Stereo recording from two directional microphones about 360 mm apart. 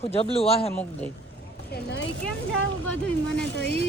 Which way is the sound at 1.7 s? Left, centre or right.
Left.